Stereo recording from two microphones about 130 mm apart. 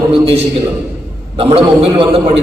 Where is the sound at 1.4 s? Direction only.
50° right (ahead or behind).